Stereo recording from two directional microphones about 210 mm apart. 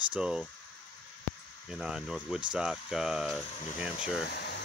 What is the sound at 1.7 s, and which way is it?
Speech, 5° right (ahead or behind).